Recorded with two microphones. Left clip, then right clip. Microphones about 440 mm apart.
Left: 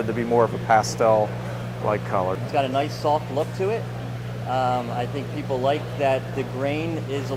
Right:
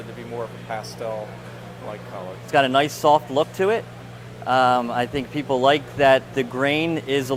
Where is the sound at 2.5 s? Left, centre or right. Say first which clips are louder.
Right 8 dB; right.